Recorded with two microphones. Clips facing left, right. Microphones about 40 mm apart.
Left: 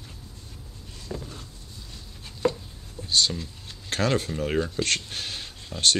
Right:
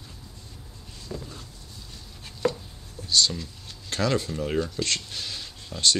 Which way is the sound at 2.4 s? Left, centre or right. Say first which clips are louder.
Left 1 dB; centre.